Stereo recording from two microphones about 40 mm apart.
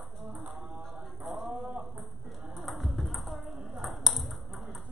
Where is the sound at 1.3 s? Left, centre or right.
Centre.